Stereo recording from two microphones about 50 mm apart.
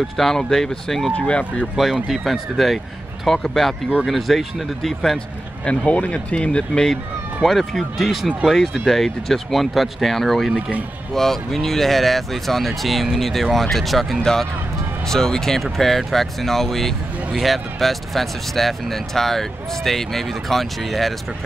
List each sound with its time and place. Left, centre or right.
0.2 s speech: centre
1.1 s speech: left
1.8 s speech: centre
5.7 s speech: left
7.4 s speech: centre